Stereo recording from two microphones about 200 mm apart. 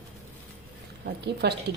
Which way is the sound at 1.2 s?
55° right (ahead or behind).